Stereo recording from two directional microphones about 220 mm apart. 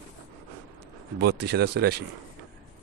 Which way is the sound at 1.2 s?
50° right (ahead or behind).